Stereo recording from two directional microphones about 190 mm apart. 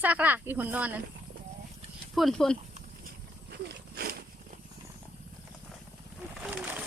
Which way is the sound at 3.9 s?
50° right (ahead or behind).